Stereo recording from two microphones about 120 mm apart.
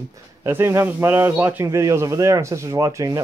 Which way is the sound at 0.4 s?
20° right (ahead or behind).